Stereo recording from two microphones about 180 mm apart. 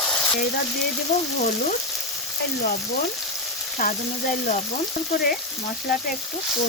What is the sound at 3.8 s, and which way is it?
Stir, 50° left (ahead or behind).